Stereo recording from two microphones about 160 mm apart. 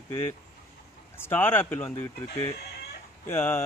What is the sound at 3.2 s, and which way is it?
Speech, 15° left (ahead or behind).